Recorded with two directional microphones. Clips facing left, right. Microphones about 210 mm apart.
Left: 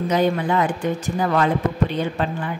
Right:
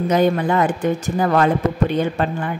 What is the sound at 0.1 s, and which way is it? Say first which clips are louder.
A woman's voice: right 3 dB; 50° right (ahead or behind).